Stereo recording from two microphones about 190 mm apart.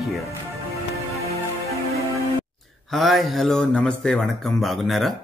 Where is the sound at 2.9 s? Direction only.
Centre (ahead or behind).